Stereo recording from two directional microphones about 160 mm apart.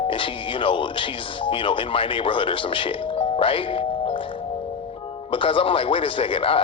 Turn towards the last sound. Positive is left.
turn(degrees=35)  # may be behind; listen again after turning